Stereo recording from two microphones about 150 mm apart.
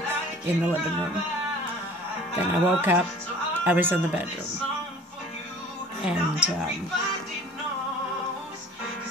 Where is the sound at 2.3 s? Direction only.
10° right (ahead or behind).